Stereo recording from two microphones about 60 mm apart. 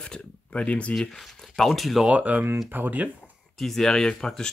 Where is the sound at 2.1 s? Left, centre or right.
Right.